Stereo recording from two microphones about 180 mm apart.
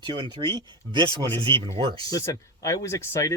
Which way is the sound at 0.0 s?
25° right (ahead or behind).